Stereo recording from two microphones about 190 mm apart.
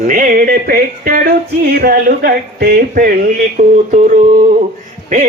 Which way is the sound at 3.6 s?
40° right (ahead or behind).